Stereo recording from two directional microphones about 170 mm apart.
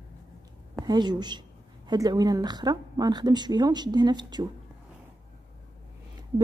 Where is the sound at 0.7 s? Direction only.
25° right (ahead or behind).